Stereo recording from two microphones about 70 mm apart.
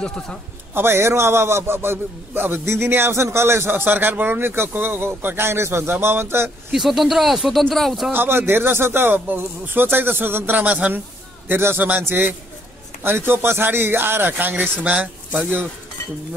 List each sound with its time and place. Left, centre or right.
0.0 s a man's voice: centre
0.7 s a man's voice: right
6.7 s speech: centre
8.1 s a man's voice: right